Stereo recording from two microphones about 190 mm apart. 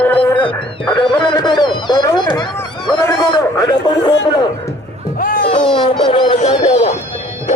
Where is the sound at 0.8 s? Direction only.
25° left (ahead or behind).